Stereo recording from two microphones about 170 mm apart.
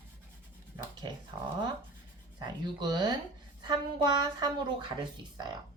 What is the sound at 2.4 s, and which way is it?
Speech, 25° right (ahead or behind).